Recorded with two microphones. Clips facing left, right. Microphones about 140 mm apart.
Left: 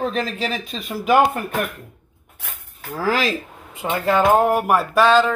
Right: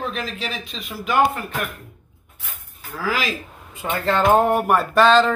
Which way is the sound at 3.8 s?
20° left (ahead or behind).